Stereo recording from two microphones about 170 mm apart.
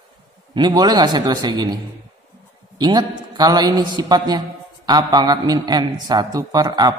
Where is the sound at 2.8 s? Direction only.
25° right (ahead or behind).